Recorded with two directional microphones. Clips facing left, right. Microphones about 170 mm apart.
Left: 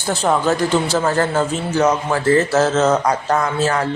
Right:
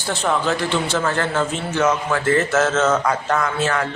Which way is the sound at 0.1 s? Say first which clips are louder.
Left 4 dB; 40° left (ahead or behind).